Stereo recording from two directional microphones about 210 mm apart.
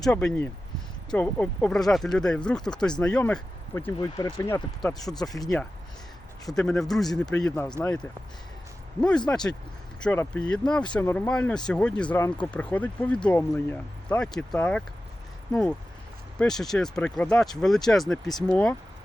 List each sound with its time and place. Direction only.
0.0 s speech: 5° left (ahead or behind)
6.5 s speech: centre (ahead or behind)
16.4 s speech: centre (ahead or behind)